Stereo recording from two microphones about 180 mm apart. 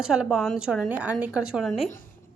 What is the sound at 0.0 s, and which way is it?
A woman's voice, 5° right (ahead or behind).